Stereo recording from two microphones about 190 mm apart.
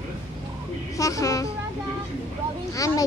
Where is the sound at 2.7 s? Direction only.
15° left (ahead or behind).